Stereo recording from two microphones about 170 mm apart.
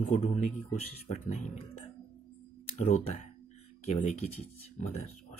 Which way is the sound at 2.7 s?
40° left (ahead or behind).